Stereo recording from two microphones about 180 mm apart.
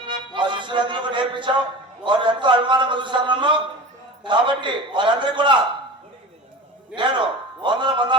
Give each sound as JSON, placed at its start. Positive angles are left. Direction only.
{"t": 0.1, "sound": "music", "side_deg": -25}
{"t": 2.0, "sound": "a man's voice", "side_deg": -25}
{"t": 6.9, "sound": "a man's voice", "side_deg": -25}